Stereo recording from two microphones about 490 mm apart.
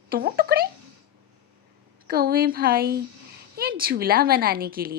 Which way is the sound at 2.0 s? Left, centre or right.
Centre.